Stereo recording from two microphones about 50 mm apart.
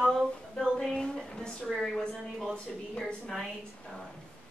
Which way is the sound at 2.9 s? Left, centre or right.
Centre.